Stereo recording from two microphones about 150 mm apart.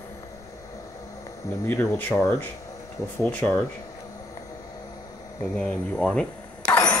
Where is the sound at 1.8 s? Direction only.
10° left (ahead or behind).